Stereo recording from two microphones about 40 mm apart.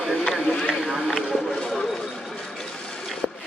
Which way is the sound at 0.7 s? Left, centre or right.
Centre.